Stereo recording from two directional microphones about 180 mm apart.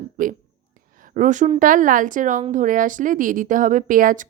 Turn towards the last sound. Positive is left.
turn(degrees=-50)  # may be behind; listen again after turning